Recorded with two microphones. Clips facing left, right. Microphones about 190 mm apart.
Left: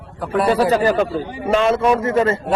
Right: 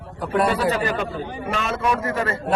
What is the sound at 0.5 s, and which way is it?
Speech, 45° left (ahead or behind).